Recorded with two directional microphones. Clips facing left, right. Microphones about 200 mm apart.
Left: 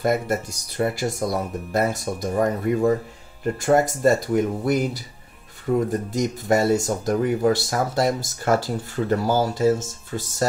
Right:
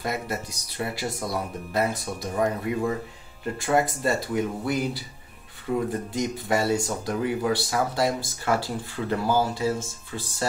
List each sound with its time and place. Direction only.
0.0 s speech: 45° left (ahead or behind)